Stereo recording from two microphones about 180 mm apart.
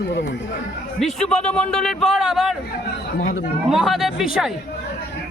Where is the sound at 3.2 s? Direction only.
45° left (ahead or behind).